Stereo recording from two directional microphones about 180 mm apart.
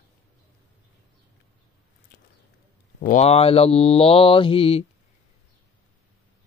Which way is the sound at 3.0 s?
40° left (ahead or behind).